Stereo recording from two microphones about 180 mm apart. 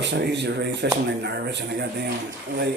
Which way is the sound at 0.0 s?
70° right (ahead or behind).